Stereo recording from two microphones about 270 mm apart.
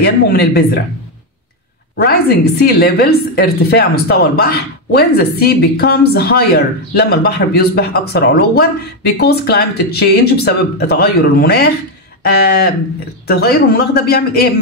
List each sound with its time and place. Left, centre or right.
0.0 s a woman's voice: left
2.6 s a woman's voice: left